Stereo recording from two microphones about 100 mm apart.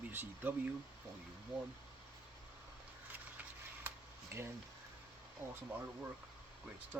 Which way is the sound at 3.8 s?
25° right (ahead or behind).